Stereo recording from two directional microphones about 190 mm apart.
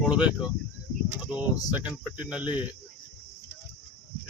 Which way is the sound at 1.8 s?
5° right (ahead or behind).